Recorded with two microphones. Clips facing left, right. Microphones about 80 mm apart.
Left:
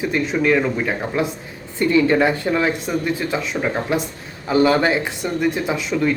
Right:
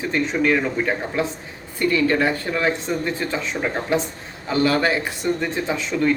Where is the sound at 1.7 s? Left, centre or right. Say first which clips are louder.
Left 3 dB; left.